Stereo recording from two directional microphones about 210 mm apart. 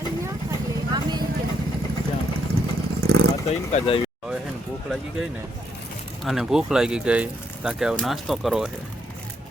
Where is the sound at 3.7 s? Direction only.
25° left (ahead or behind).